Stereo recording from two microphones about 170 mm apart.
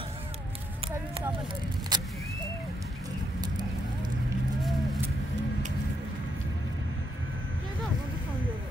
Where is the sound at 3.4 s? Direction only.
25° right (ahead or behind).